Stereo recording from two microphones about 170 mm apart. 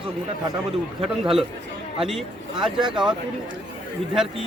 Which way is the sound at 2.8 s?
30° right (ahead or behind).